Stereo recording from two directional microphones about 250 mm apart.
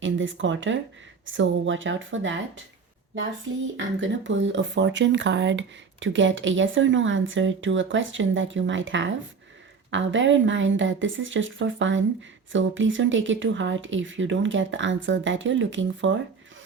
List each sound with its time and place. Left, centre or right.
0.0 s speech: right
3.8 s speech: right